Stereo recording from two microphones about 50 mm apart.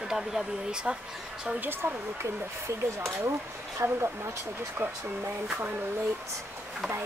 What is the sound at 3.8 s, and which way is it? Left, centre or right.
Speech, right.